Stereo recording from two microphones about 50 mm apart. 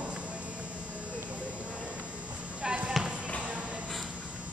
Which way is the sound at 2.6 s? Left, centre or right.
Centre.